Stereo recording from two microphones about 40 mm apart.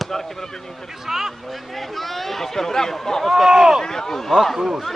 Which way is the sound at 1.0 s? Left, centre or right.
Centre.